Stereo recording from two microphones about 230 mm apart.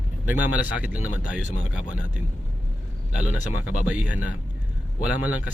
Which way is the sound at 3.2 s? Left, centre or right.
Centre.